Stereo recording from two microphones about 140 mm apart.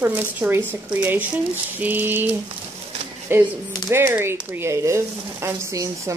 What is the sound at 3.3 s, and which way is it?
Speech, 15° right (ahead or behind).